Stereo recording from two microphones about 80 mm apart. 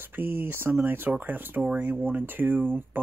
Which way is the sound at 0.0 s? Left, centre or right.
Right.